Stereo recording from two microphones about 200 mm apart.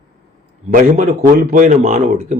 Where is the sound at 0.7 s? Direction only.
40° right (ahead or behind).